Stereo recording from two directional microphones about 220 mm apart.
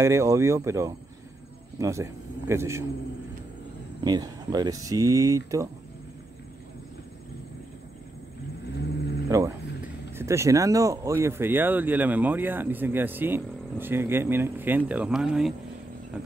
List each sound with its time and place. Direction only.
0.0 s speech: 15° right (ahead or behind)
4.0 s speech: 20° right (ahead or behind)
9.3 s speech: 15° right (ahead or behind)